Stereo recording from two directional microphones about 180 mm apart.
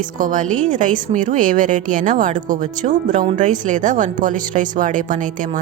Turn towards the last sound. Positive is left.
turn(degrees=-45)  # may be behind; listen again after turning